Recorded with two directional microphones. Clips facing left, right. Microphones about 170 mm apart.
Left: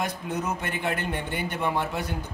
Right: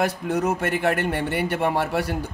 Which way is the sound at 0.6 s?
75° right (ahead or behind).